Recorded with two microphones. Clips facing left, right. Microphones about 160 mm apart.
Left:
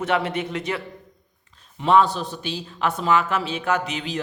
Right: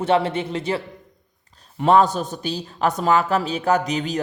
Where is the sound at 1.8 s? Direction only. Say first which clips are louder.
Right 2 dB; 45° right (ahead or behind).